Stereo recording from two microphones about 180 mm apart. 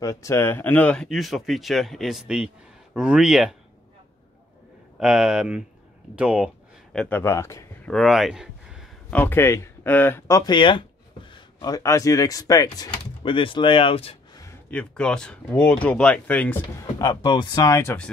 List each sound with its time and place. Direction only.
0.0 s speech: 15° left (ahead or behind); by 3.5 s 5° right (ahead or behind)
4.9 s speech: 5° right (ahead or behind)
6.9 s speech: 5° left (ahead or behind)
7.9 s speech: centre (ahead or behind)
9.1 s speech: 10° left (ahead or behind); by 14.4 s 30° left (ahead or behind)
14.7 s speech: 5° left (ahead or behind)
17.0 s speech: 25° left (ahead or behind)